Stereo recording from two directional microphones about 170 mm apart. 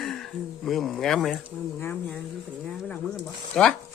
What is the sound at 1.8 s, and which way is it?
Speech, 10° left (ahead or behind).